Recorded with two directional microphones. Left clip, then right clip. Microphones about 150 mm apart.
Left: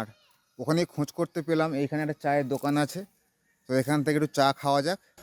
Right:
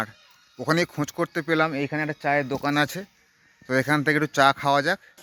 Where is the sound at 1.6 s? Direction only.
25° left (ahead or behind).